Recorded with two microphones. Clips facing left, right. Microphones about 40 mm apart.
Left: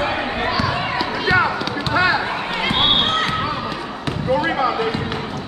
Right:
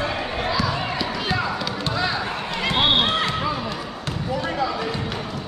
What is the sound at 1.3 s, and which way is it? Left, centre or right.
Music, left.